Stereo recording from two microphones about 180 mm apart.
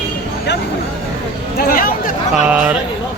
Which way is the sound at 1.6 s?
55° left (ahead or behind).